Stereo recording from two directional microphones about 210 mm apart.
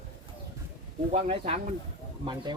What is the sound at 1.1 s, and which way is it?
Speech, 30° right (ahead or behind).